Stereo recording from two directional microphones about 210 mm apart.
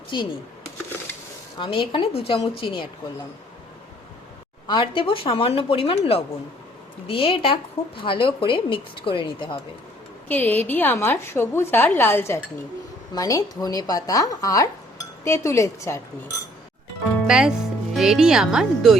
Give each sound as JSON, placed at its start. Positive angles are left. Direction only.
{"t": 0.1, "sound": "a woman's voice", "side_deg": 20}
{"t": 4.7, "sound": "a woman's voice", "side_deg": 25}
{"t": 10.2, "sound": "speech", "side_deg": 10}
{"t": 17.2, "sound": "speech", "side_deg": -5}